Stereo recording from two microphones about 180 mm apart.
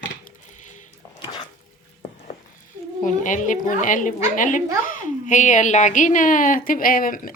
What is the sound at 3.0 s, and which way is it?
Speech, 45° left (ahead or behind).